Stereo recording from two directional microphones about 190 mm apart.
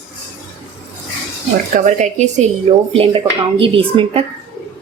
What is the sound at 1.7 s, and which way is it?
Speech, 40° right (ahead or behind).